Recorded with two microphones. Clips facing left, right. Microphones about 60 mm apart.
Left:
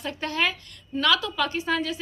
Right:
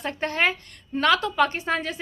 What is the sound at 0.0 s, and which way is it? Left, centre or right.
A woman's voice, right.